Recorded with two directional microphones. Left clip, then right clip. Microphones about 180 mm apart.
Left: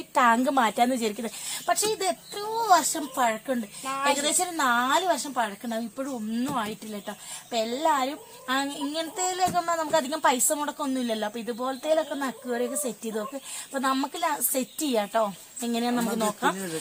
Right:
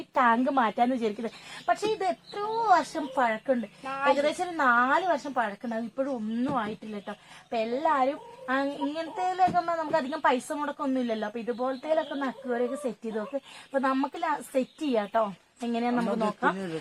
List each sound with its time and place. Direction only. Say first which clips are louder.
0.1 s a woman's voice: left 2 dB; 40° left (ahead or behind)
3.8 s a woman's voice: left 1 dB; 15° right (ahead or behind)
4.2 s a woman's voice: even; 40° left (ahead or behind)
13.7 s a woman's voice: even; 45° left (ahead or behind)